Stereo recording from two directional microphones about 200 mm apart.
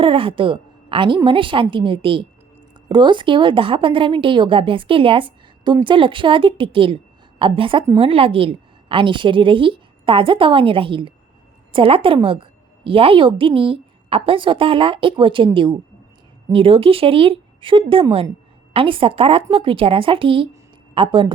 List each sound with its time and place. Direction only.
0.0 s a woman's voice: 25° right (ahead or behind)
16.5 s a woman's voice: 25° right (ahead or behind)